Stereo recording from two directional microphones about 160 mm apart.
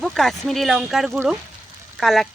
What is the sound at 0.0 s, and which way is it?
Speech, centre (ahead or behind).